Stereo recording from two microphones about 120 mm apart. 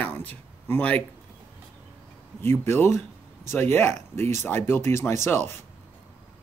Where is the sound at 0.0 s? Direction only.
15° left (ahead or behind).